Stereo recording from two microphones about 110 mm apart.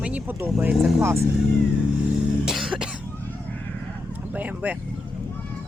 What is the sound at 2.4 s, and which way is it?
Cough, 5° right (ahead or behind).